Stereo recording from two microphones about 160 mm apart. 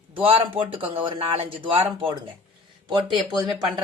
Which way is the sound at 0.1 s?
35° right (ahead or behind).